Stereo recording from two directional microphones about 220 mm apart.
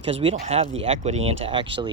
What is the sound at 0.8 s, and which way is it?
Speech, 30° right (ahead or behind).